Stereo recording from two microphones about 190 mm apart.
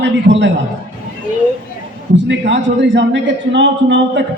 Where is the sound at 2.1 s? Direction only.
70° right (ahead or behind).